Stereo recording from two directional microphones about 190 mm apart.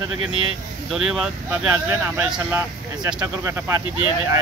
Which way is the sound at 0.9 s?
Centre (ahead or behind).